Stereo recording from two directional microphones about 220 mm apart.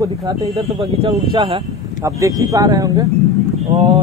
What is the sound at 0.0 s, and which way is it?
Speech, 15° right (ahead or behind).